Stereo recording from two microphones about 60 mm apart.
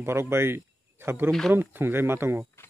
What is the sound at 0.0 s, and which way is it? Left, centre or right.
Speech, right.